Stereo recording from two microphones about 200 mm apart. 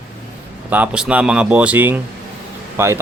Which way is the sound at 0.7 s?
5° right (ahead or behind).